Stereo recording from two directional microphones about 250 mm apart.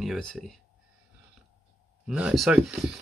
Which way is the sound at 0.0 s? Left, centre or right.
Centre.